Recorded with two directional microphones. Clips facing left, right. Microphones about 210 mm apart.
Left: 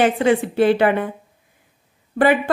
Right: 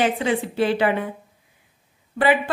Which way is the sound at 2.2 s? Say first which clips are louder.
Left 4 dB; 50° left (ahead or behind).